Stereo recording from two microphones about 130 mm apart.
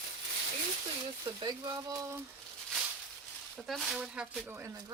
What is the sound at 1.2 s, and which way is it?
Speech, 30° right (ahead or behind).